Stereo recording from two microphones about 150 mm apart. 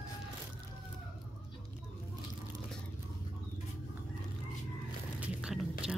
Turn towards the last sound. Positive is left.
turn(degrees=-5)  # may be behind; listen again after turning